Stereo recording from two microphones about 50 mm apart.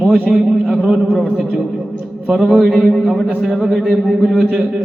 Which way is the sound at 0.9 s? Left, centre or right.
Centre.